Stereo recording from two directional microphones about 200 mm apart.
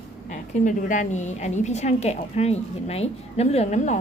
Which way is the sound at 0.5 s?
40° left (ahead or behind).